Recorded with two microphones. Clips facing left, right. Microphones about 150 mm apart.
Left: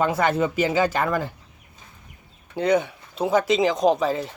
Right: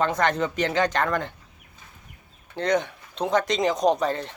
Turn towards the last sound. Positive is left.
turn(degrees=5)  # may be behind; listen again after turning